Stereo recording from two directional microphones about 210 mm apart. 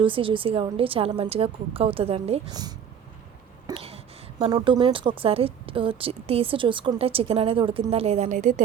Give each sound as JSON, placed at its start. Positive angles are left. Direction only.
{"t": 0.0, "sound": "a woman's voice", "side_deg": -25}